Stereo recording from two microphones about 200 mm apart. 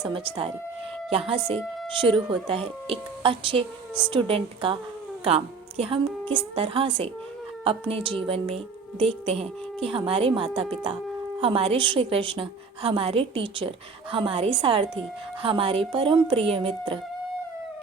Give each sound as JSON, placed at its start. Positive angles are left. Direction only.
{"t": 0.0, "sound": "a woman's voice", "side_deg": -25}
{"t": 1.9, "sound": "a woman's voice", "side_deg": -25}